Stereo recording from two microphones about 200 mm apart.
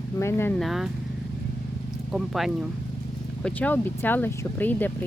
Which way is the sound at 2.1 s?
Centre (ahead or behind).